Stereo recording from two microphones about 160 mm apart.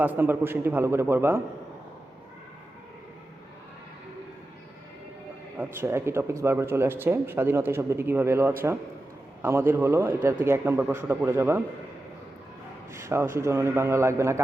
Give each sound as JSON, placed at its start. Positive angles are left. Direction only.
{"t": 0.0, "sound": "speech", "side_deg": -10}
{"t": 5.5, "sound": "speech", "side_deg": -15}
{"t": 12.9, "sound": "speech", "side_deg": -15}